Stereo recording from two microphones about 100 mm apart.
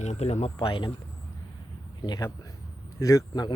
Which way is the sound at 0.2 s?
90° left.